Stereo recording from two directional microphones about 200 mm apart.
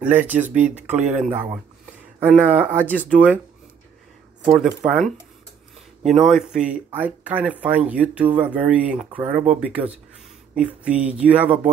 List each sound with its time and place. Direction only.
0.0 s speech: 10° right (ahead or behind)
0.7 s speech: 35° right (ahead or behind)
1.2 s speech: 10° right (ahead or behind)
4.5 s speech: centre (ahead or behind)